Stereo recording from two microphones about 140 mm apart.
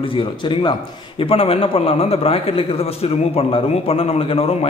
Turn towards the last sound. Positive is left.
turn(degrees=45)  # may be behind; listen again after turning